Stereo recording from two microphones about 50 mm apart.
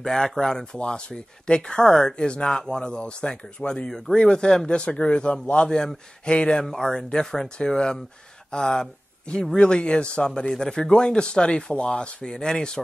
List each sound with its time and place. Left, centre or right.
0.0 s speech: centre
6.6 s speech: centre